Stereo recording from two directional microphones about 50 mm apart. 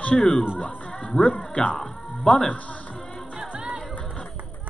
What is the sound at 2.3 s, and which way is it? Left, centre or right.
Speech, left.